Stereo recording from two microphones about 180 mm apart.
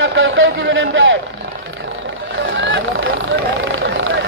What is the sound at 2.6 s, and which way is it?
Vehicle, 90° right.